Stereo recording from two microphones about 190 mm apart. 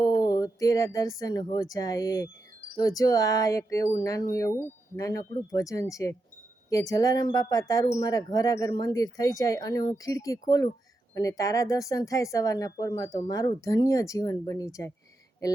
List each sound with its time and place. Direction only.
0.0 s a woman's voice: 20° left (ahead or behind)